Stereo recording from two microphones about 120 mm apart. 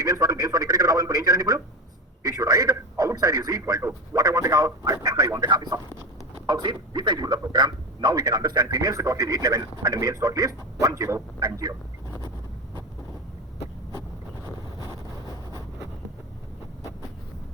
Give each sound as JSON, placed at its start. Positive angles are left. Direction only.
{"t": 0.0, "sound": "a man's voice", "side_deg": -30}